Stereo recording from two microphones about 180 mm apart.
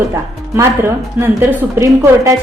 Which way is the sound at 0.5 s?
15° right (ahead or behind).